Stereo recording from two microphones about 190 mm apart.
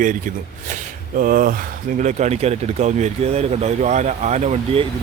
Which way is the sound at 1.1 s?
45° right (ahead or behind).